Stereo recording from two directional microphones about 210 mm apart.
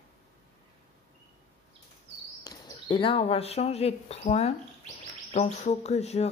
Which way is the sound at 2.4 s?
20° left (ahead or behind).